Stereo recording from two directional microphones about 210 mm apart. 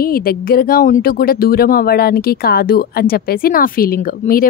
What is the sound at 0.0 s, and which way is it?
A woman's voice, 45° left (ahead or behind).